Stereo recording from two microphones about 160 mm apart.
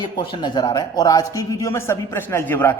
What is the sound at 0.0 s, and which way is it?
Speech, 30° left (ahead or behind).